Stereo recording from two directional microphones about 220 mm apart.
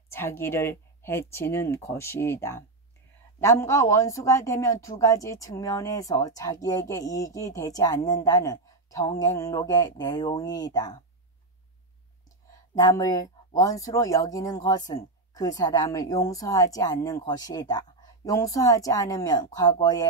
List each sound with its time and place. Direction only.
0.1 s speech: 10° left (ahead or behind)
12.7 s speech: 15° left (ahead or behind)